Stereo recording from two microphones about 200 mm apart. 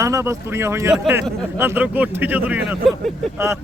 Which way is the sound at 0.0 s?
15° right (ahead or behind).